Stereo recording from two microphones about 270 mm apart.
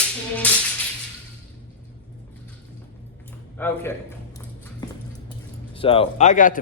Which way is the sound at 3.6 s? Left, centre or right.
Centre.